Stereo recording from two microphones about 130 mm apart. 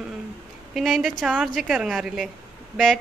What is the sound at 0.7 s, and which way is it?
A man's voice, centre (ahead or behind).